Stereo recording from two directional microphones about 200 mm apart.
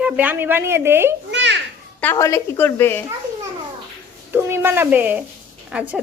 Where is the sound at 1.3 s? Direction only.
60° right (ahead or behind).